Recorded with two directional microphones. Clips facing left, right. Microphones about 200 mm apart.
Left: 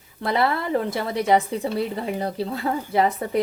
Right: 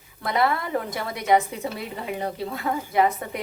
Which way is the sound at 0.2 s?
30° left (ahead or behind).